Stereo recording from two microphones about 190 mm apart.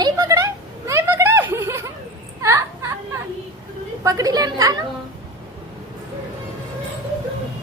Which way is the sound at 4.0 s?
15° right (ahead or behind).